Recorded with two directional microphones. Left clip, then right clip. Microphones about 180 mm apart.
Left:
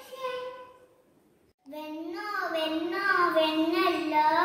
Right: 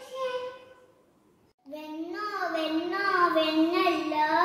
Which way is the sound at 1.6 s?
Centre (ahead or behind).